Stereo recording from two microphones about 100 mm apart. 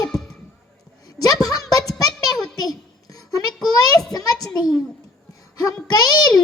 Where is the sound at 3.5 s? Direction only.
5° left (ahead or behind).